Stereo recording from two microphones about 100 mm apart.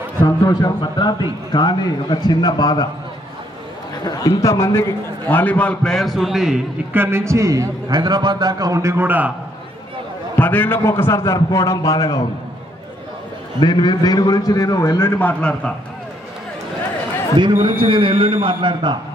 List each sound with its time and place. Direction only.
0.2 s a man's voice: 40° left (ahead or behind)
4.0 s a man's voice: 40° left (ahead or behind)
5.3 s a man's voice: 15° left (ahead or behind); by 6.6 s 5° right (ahead or behind)
6.9 s a man's voice: 25° right (ahead or behind)
7.9 s a man's voice: 45° right (ahead or behind); by 9.3 s 20° right (ahead or behind)
10.3 s a man's voice: 15° left (ahead or behind); by 12.2 s 35° left (ahead or behind)
13.6 s a man's voice: 50° left (ahead or behind)
15.0 s a man's voice: 20° left (ahead or behind)
17.8 s a man's voice: 65° right (ahead or behind)